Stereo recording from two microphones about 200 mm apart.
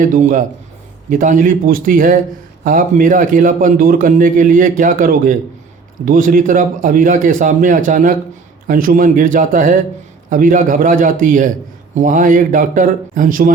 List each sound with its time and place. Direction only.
0.0 s a man's voice: 40° right (ahead or behind)